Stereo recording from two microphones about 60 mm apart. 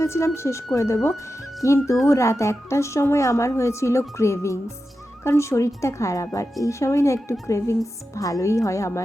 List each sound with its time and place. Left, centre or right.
0.0 s a woman's voice: left